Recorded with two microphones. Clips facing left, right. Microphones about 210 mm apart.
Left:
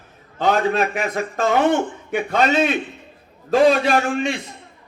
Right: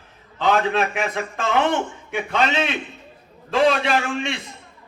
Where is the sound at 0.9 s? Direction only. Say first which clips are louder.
Left 2 dB; 45° left (ahead or behind).